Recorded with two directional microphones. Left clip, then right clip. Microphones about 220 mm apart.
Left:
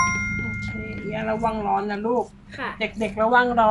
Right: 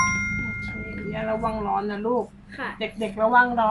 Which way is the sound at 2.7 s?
35° left (ahead or behind).